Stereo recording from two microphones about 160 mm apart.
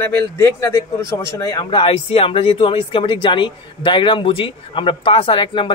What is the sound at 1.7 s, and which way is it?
Speech, 35° left (ahead or behind).